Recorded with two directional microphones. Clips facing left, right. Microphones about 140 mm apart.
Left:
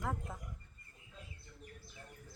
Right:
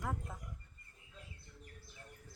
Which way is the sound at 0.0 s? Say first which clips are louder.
Left 2 dB; centre (ahead or behind).